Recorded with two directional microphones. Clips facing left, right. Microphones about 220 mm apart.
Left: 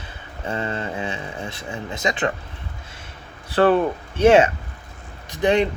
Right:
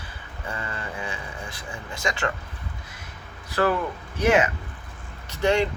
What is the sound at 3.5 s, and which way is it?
Speech, 30° left (ahead or behind).